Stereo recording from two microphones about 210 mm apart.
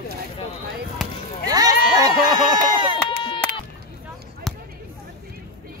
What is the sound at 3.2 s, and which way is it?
Run, 25° left (ahead or behind).